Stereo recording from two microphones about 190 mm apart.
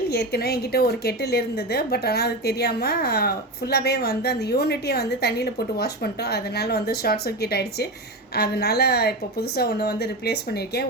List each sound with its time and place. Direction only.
0.1 s a woman's voice: 60° left (ahead or behind)